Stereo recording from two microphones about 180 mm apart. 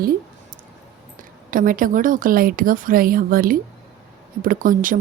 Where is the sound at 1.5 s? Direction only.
50° right (ahead or behind).